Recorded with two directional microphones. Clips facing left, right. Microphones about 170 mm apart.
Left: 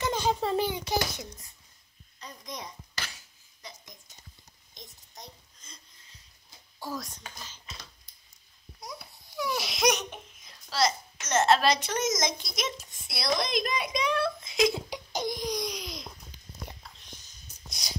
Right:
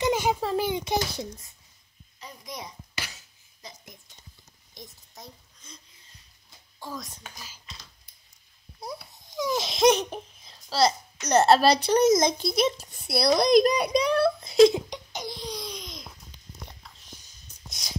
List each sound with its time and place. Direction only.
0.0 s a child's voice: 10° right (ahead or behind)
0.7 s a child's voice: 20° right (ahead or behind)
2.1 s a child's voice: 5° right (ahead or behind)
4.8 s a child's voice: centre (ahead or behind)
6.8 s a child's voice: 10° left (ahead or behind)
7.1 s speech: 10° right (ahead or behind)
9.3 s speech: 20° right (ahead or behind)
14.9 s crying: 5° left (ahead or behind)
15.2 s laughter: 15° left (ahead or behind)